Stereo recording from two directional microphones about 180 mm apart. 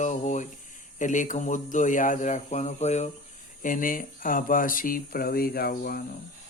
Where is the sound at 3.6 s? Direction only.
50° left (ahead or behind).